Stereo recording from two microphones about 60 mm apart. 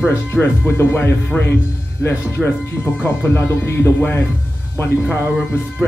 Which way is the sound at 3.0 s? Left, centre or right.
Left.